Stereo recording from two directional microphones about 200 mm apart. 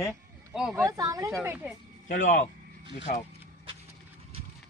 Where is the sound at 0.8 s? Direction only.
15° right (ahead or behind).